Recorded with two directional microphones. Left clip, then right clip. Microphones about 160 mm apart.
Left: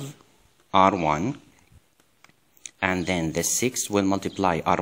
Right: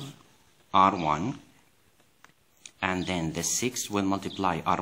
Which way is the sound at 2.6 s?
35° left (ahead or behind).